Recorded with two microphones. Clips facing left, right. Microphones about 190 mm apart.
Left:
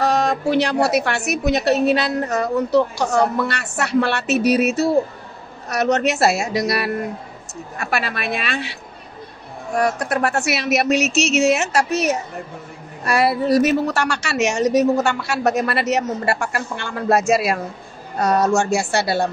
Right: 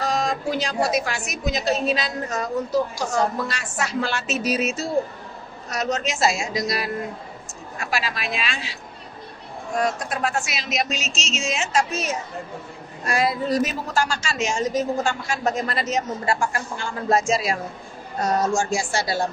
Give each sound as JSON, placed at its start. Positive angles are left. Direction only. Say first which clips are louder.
{"t": 0.0, "sound": "a woman's voice", "louder": "left 5 dB", "side_deg": 65}
{"t": 9.8, "sound": "a woman's voice", "louder": "left 5 dB", "side_deg": 65}